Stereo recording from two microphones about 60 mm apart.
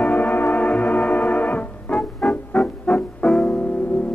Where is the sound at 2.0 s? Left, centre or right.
Centre.